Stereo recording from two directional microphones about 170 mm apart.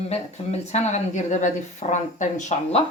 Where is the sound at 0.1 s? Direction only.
40° left (ahead or behind).